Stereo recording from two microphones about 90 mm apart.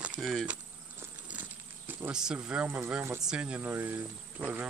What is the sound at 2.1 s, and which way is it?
Speech, 10° right (ahead or behind).